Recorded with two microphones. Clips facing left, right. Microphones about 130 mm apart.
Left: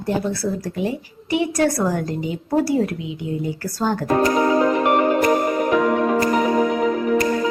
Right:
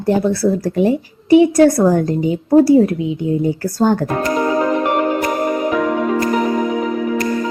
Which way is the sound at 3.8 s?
55° right (ahead or behind).